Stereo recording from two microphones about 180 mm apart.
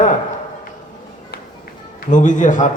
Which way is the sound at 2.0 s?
45° left (ahead or behind).